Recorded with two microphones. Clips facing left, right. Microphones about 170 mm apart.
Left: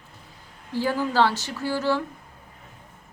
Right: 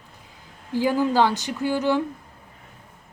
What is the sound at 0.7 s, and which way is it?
Speech, 15° right (ahead or behind).